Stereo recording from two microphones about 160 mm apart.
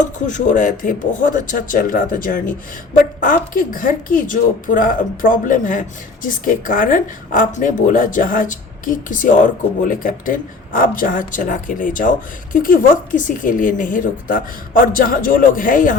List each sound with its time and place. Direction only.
0.0 s a woman's voice: 50° left (ahead or behind)